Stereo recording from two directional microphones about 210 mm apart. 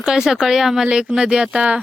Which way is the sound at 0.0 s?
5° right (ahead or behind).